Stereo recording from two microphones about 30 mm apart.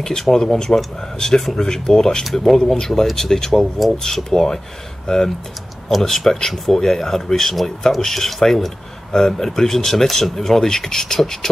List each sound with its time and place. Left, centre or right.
0.0 s speech: centre
2.3 s speech: centre